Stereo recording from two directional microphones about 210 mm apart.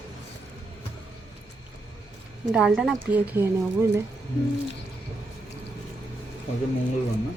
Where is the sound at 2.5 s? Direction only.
5° right (ahead or behind).